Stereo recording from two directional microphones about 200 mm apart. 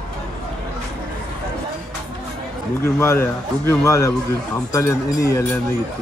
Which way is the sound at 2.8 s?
15° left (ahead or behind).